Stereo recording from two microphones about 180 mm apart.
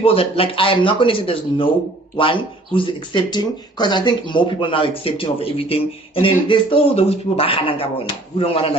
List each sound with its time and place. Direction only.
0.0 s speech: 30° left (ahead or behind)